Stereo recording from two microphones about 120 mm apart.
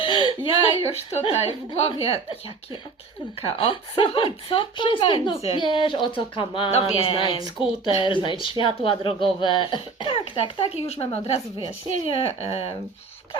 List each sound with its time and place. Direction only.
0.0 s speech: 45° left (ahead or behind)
3.4 s speech: 50° left (ahead or behind)